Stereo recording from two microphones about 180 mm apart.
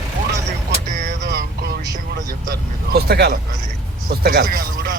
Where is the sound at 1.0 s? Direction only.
70° right (ahead or behind).